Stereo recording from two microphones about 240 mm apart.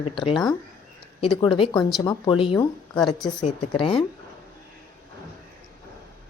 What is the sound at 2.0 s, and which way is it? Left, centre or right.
Speech, centre.